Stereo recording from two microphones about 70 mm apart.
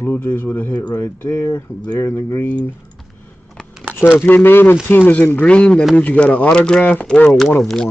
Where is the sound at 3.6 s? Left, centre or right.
Centre.